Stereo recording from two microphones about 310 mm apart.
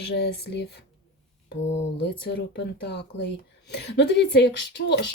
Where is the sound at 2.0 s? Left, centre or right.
Left.